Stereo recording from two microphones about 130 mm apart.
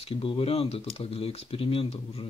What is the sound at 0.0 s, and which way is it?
Speech, 45° left (ahead or behind).